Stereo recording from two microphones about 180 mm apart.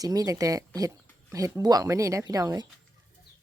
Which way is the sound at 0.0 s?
20° right (ahead or behind).